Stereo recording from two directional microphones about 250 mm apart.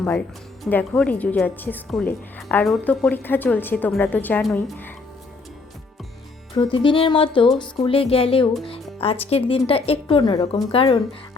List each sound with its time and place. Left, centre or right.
0.6 s a woman's voice: centre
6.5 s speech: centre